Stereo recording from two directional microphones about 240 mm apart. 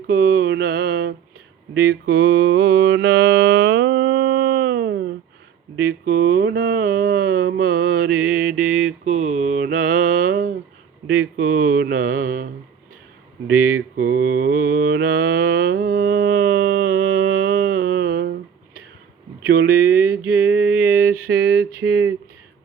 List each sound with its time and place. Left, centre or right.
0.1 s mantra: right
13.5 s mantra: right
19.5 s a sound: right